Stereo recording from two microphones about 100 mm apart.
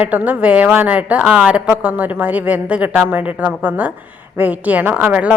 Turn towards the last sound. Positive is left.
turn(degrees=-15)  # may be behind; listen again after turning